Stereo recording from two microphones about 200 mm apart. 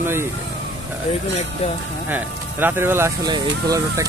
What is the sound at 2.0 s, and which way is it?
Speech, 10° right (ahead or behind).